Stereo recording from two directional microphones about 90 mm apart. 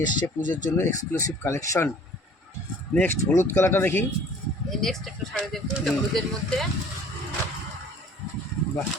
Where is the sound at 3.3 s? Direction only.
25° left (ahead or behind).